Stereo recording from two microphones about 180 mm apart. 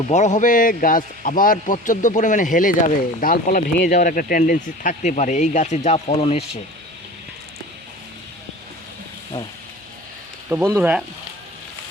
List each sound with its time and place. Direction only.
0.1 s a man's voice: 40° left (ahead or behind)
10.5 s speech: 10° right (ahead or behind)